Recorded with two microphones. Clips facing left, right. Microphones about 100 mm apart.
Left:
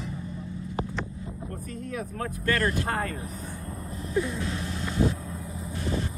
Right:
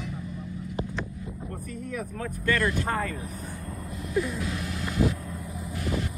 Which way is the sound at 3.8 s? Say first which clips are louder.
Even; 30° left (ahead or behind).